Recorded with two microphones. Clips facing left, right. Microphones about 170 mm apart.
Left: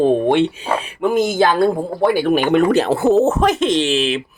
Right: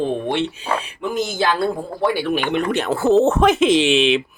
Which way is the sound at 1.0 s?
50° left (ahead or behind).